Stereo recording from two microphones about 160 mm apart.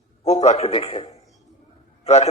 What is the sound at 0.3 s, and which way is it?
A man's voice, 45° left (ahead or behind).